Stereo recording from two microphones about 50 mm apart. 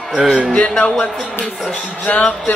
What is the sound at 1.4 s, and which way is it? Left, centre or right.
Speech, centre.